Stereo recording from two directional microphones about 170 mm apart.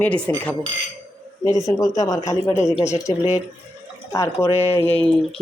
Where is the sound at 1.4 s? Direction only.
20° left (ahead or behind).